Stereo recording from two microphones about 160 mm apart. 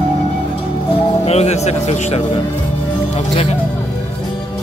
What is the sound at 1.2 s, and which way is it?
Speech, 40° left (ahead or behind).